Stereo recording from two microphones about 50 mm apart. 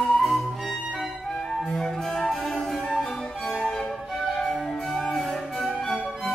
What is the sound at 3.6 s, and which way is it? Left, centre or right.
Music, centre.